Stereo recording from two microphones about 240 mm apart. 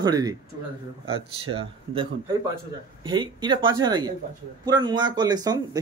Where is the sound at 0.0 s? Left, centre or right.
Centre.